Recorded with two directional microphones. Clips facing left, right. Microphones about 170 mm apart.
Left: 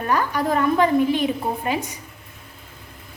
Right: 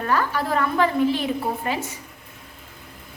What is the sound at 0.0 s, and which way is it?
A woman's voice, 15° left (ahead or behind).